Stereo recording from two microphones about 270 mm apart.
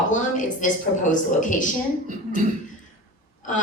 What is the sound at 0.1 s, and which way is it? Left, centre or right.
A woman's voice, left.